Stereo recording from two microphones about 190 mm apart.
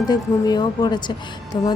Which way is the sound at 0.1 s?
20° left (ahead or behind).